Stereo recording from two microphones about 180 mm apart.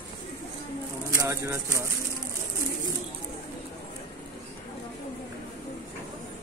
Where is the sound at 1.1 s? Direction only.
15° right (ahead or behind).